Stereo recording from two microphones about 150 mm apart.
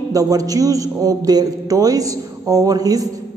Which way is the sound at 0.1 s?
25° right (ahead or behind).